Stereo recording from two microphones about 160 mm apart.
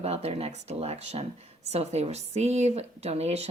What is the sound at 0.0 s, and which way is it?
Speech, 40° right (ahead or behind).